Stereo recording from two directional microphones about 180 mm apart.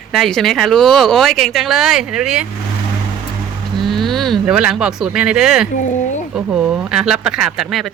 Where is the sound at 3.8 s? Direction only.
Centre (ahead or behind).